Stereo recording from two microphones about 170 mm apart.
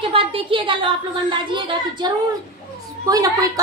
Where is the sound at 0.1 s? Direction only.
30° right (ahead or behind).